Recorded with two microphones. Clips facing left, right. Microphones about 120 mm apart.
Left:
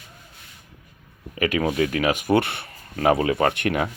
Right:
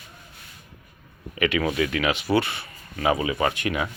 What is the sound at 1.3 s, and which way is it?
Speech, 40° left (ahead or behind).